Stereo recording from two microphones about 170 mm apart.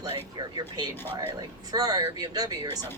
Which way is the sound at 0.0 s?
25° right (ahead or behind).